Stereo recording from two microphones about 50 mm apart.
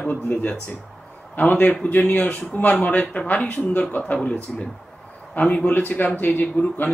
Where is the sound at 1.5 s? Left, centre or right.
Centre.